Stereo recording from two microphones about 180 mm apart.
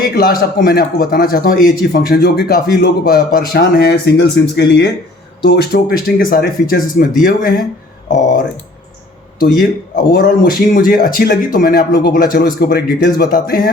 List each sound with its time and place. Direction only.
0.1 s a man's voice: 60° left (ahead or behind)
9.4 s speech: 50° left (ahead or behind)